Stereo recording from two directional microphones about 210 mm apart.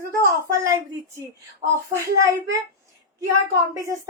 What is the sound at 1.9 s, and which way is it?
Speech, 15° right (ahead or behind).